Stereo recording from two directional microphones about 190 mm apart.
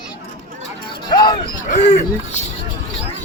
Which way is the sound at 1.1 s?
25° left (ahead or behind).